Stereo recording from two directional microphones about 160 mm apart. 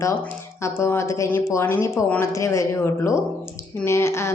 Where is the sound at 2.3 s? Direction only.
20° left (ahead or behind).